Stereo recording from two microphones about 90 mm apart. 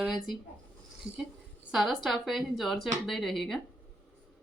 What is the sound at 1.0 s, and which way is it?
Speech, 90° right.